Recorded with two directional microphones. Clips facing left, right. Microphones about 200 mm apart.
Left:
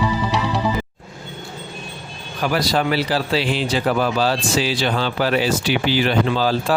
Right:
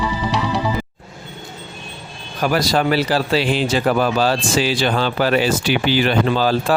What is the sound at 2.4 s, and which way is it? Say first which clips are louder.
A man's voice: right 2 dB; 45° right (ahead or behind).